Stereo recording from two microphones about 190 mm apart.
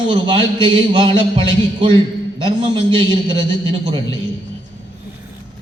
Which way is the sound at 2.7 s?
25° right (ahead or behind).